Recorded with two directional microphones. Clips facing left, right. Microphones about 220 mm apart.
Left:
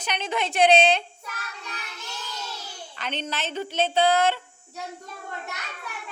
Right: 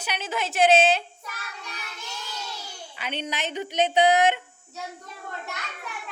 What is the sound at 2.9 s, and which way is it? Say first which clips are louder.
Speech: even; 10° right (ahead or behind).